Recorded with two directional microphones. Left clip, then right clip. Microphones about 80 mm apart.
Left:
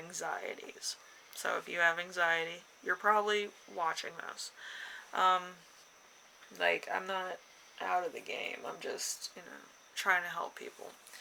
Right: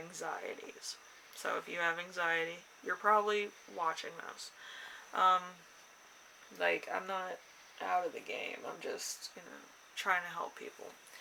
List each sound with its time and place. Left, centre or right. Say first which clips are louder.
0.1 s speech: left 3 dB; left
6.6 s speech: left 2 dB; left